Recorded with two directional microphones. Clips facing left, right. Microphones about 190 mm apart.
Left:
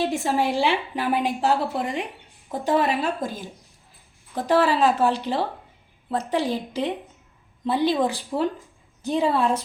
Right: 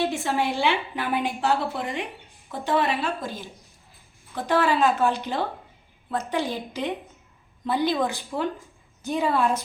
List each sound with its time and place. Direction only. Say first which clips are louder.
0.3 s a woman's voice: left 4 dB; 35° left (ahead or behind)
4.4 s a woman's voice: left 2 dB; 35° left (ahead or behind)